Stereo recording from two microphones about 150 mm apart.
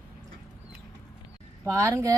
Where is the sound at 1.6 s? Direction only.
20° right (ahead or behind).